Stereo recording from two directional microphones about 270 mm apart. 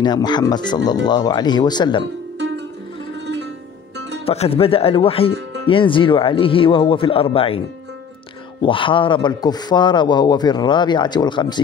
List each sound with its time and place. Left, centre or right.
0.0 s speech: centre
4.3 s speech: left